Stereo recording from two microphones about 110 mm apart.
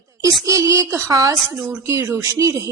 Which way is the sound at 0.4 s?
30° right (ahead or behind).